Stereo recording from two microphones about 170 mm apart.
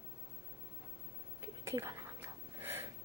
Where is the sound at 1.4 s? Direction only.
15° right (ahead or behind).